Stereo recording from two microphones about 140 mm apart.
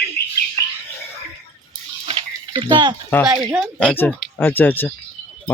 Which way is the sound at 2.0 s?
40° right (ahead or behind).